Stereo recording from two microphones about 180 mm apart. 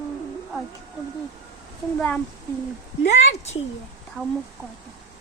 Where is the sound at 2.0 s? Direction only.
10° left (ahead or behind).